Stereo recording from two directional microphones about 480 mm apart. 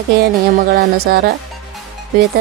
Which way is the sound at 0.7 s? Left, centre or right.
Centre.